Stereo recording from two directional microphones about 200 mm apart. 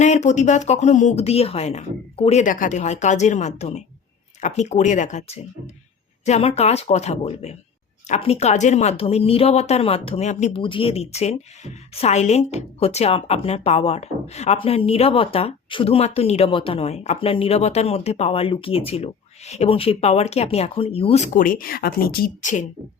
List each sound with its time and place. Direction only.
0.0 s a woman's voice: 35° left (ahead or behind)
21.3 s speech: 45° left (ahead or behind)